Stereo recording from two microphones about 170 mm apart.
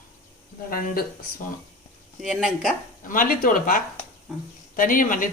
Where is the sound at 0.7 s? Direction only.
60° left (ahead or behind).